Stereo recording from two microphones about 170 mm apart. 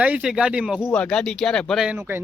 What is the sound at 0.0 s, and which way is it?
Speech, 5° right (ahead or behind).